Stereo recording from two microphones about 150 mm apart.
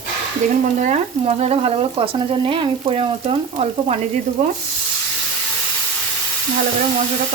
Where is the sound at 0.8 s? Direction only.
50° right (ahead or behind).